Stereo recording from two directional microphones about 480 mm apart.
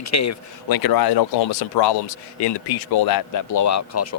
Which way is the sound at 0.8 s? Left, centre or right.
Left.